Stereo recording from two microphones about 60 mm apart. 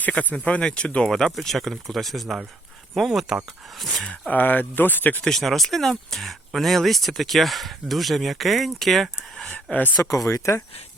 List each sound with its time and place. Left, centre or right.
0.1 s speech: left
1.0 s speech: centre
3.1 s speech: centre
3.8 s speech: centre
4.3 s speech: left
5.2 s speech: centre
9.7 s speech: left
10.0 s speech: left